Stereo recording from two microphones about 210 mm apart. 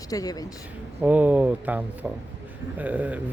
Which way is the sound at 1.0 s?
5° right (ahead or behind).